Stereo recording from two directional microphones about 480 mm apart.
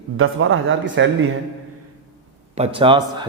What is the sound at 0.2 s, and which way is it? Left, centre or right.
Speech, right.